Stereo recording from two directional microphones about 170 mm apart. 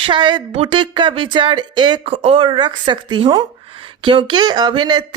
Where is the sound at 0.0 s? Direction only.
25° right (ahead or behind).